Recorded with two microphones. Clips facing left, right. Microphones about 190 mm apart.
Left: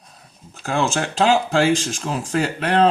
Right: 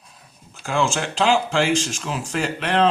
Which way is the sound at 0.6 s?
40° left (ahead or behind).